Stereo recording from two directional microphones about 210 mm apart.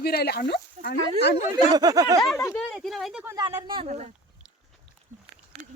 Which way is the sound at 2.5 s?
Centre (ahead or behind).